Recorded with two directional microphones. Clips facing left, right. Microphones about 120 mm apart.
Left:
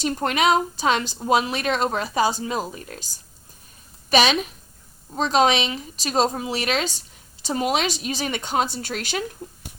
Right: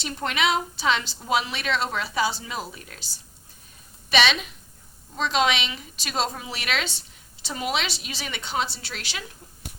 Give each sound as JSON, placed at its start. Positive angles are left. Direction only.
{"t": 0.0, "sound": "a woman's voice", "side_deg": 40}